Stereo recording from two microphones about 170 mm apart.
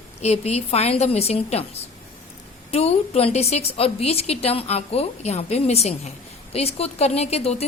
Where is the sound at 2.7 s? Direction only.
35° left (ahead or behind).